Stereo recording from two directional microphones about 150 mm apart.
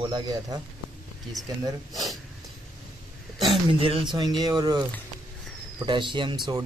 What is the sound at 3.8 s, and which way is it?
Speech, 40° right (ahead or behind).